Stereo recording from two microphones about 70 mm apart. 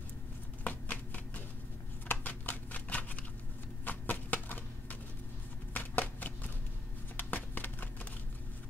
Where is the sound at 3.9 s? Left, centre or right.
Left.